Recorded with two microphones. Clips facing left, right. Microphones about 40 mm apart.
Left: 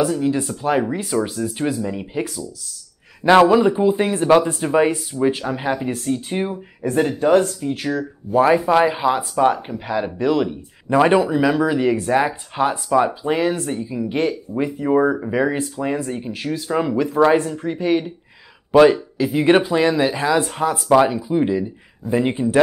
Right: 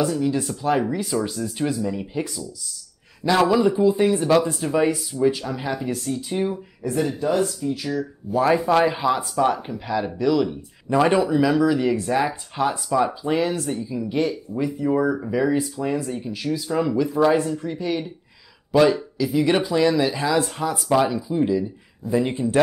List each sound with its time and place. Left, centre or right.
0.0 s speech: centre
3.3 s speech: left
3.5 s speech: left
6.9 s speech: left
8.3 s speech: left
8.5 s speech: centre
9.2 s speech: left
9.5 s speech: centre